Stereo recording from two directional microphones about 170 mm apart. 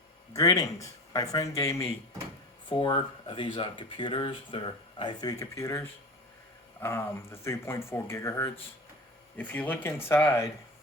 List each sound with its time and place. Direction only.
0.3 s speech: 20° left (ahead or behind)
6.8 s speech: 15° left (ahead or behind)